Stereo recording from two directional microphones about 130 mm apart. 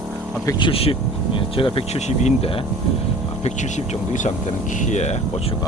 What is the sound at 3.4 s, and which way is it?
Speech, 60° left (ahead or behind).